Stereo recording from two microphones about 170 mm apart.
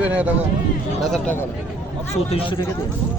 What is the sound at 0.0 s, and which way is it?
Speech, 10° right (ahead or behind).